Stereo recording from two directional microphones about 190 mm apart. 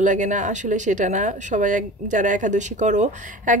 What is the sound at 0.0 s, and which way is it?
A woman's voice, 40° right (ahead or behind).